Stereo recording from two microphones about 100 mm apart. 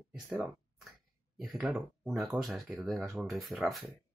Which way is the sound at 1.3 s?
Centre (ahead or behind).